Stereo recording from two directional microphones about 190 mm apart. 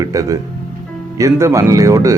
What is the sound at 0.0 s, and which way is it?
Speech, 15° right (ahead or behind).